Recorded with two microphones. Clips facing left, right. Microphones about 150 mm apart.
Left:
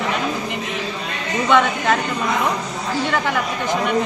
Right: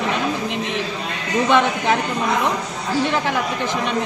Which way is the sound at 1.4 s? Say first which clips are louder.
Left 1 dB; 15° right (ahead or behind).